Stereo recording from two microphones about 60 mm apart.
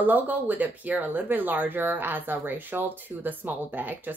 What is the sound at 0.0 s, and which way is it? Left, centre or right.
Speech, right.